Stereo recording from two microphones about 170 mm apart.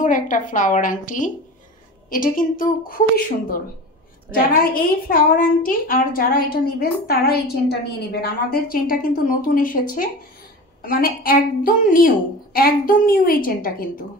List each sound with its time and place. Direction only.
0.0 s a woman's voice: 50° left (ahead or behind)
4.3 s a woman's voice: 60° left (ahead or behind)